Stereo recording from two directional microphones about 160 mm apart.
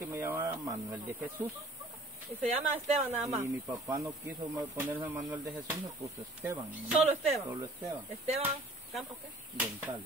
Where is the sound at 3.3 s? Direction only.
20° right (ahead or behind).